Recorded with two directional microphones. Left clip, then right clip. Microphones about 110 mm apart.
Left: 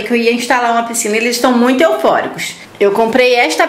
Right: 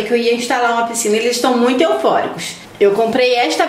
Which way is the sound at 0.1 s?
40° left (ahead or behind).